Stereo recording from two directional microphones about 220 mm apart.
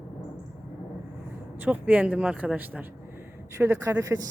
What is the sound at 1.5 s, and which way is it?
Speech, 5° right (ahead or behind).